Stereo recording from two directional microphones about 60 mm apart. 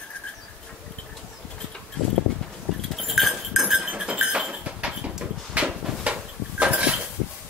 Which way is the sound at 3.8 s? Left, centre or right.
Centre.